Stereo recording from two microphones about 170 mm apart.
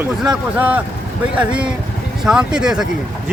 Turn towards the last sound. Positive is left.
turn(degrees=-5)  # may be behind; listen again after turning